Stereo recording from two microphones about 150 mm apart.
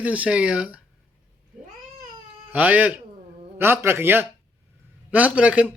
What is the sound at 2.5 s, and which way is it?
Speech, 10° right (ahead or behind).